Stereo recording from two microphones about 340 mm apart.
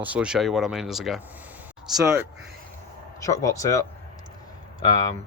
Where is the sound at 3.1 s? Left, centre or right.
Centre.